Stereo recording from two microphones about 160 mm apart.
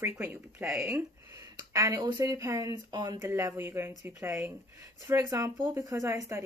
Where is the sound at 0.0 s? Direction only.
10° right (ahead or behind).